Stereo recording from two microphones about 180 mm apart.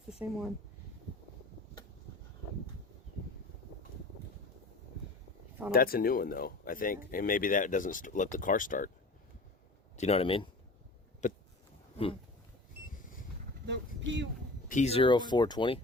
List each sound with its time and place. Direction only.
0.2 s speech: 10° right (ahead or behind)
5.7 s speech: 55° left (ahead or behind)
10.0 s speech: 35° left (ahead or behind)
11.2 s biting: 45° left (ahead or behind)
13.7 s speech: 85° right
14.7 s speech: 40° left (ahead or behind)